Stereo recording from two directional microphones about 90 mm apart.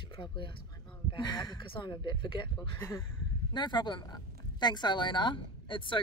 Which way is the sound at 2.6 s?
30° left (ahead or behind).